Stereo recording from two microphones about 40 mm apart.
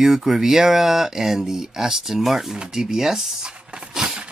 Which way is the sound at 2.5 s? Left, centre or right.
Centre.